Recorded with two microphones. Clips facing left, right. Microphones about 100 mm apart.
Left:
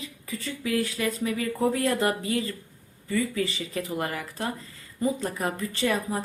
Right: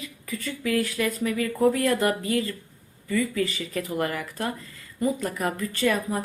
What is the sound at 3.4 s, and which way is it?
Speech, 25° left (ahead or behind).